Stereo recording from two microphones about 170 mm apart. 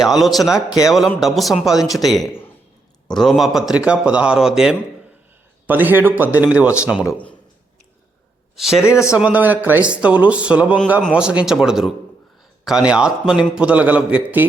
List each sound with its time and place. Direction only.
0.0 s a man's voice: centre (ahead or behind)
7.1 s speech: 10° left (ahead or behind)
8.5 s a man's voice: centre (ahead or behind)
8.8 s speech: 15° left (ahead or behind)
9.1 s a man's voice: 10° right (ahead or behind)